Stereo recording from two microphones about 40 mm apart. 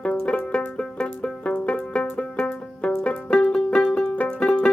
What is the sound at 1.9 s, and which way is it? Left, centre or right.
Music, left.